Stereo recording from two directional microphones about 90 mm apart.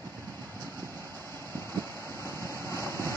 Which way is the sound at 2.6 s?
30° left (ahead or behind).